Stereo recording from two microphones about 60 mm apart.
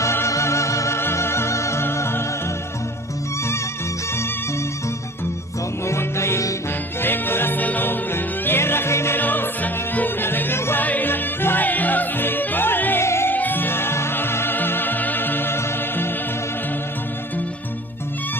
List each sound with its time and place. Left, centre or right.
0.0 s music: left
0.9 s music: left
5.8 s music: left
9.1 s music: left
13.1 s music: left
13.3 s music: left